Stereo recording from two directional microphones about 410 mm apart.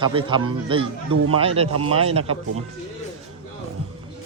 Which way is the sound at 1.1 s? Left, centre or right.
Right.